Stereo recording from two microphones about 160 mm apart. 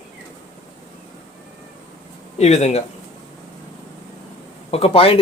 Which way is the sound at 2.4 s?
45° left (ahead or behind).